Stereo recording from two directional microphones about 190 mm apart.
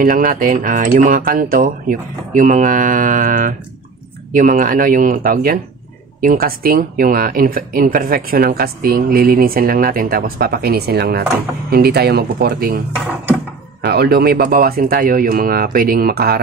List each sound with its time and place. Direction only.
0.0 s speech: 45° right (ahead or behind)
13.8 s speech: 55° right (ahead or behind)